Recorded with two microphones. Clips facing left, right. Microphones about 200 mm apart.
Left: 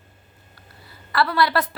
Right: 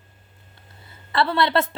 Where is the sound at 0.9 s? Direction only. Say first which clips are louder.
Right 1 dB; 25° right (ahead or behind).